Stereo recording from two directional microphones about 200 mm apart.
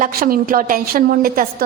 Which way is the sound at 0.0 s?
45° right (ahead or behind).